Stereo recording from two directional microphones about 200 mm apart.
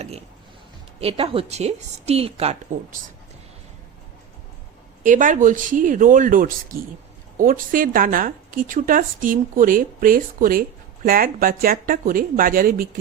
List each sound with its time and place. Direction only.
0.0 s a woman's voice: 30° right (ahead or behind)
5.0 s a woman's voice: 40° right (ahead or behind)